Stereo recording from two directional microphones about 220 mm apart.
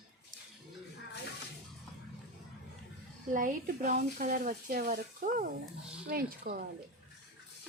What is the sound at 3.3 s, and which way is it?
Speech, 35° right (ahead or behind).